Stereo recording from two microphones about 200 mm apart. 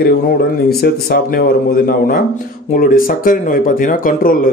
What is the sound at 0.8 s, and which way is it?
Speech, 45° left (ahead or behind).